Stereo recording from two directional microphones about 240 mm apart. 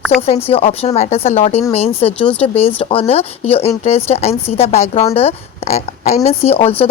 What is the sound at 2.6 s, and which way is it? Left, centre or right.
Speech, left.